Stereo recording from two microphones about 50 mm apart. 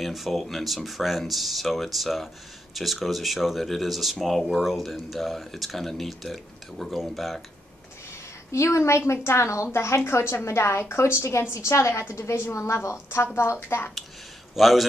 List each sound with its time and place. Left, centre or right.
0.0 s speech: centre
8.5 s a woman's voice: left
12.9 s a woman's voice: left
14.5 s a man's voice: centre